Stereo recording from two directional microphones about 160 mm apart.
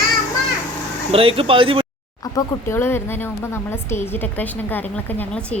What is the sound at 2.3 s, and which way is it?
A woman's voice, 20° left (ahead or behind).